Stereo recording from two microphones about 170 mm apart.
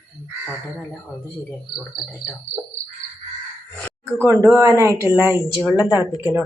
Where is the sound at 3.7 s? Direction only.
10° left (ahead or behind).